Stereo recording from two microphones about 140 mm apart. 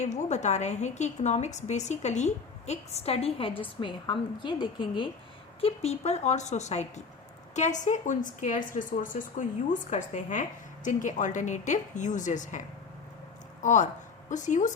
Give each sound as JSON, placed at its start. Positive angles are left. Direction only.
{"t": 0.0, "sound": "a woman's voice", "side_deg": 55}
{"t": 5.5, "sound": "a woman's voice", "side_deg": 45}